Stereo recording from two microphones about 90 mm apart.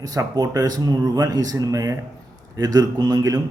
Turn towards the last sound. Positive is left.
turn(degrees=-45)  # may be behind; listen again after turning